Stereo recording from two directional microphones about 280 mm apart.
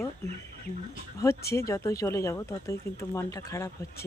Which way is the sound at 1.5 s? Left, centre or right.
Centre.